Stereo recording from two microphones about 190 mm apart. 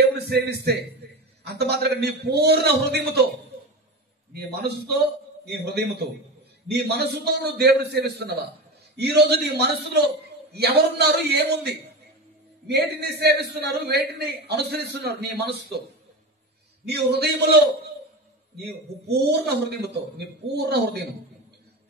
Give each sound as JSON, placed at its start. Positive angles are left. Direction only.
{"t": 0.3, "sound": "a man's voice", "side_deg": -60}
{"t": 4.3, "sound": "a man's voice", "side_deg": -60}
{"t": 16.8, "sound": "a man's voice", "side_deg": -60}
{"t": 18.6, "sound": "a man's voice", "side_deg": -60}